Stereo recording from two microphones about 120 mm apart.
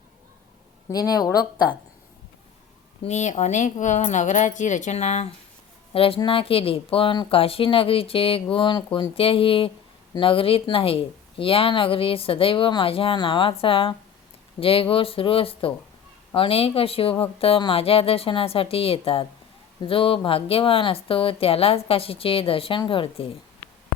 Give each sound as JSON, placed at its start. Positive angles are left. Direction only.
{"t": 0.9, "sound": "speech", "side_deg": 30}
{"t": 3.1, "sound": "speech", "side_deg": 80}
{"t": 5.9, "sound": "speech", "side_deg": 50}